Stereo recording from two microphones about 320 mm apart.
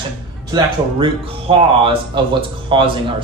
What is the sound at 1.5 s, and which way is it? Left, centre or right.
Speech, centre.